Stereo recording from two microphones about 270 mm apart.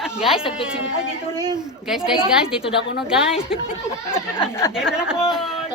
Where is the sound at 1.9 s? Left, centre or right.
Centre.